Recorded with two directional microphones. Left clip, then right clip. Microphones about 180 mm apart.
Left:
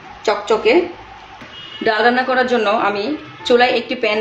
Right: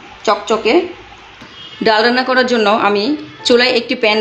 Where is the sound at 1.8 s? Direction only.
45° right (ahead or behind).